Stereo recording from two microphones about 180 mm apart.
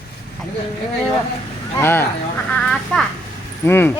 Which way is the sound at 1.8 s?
15° left (ahead or behind).